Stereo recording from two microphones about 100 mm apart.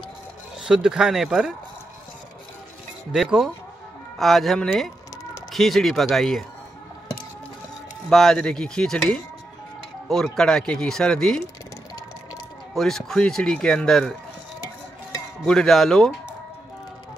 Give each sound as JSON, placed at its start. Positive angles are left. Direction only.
{"t": 0.6, "sound": "speech", "side_deg": -5}
{"t": 3.1, "sound": "speech", "side_deg": -5}
{"t": 8.1, "sound": "a sound", "side_deg": 5}
{"t": 10.0, "sound": "speech", "side_deg": 5}
{"t": 12.7, "sound": "speech", "side_deg": 5}
{"t": 15.4, "sound": "speech", "side_deg": 5}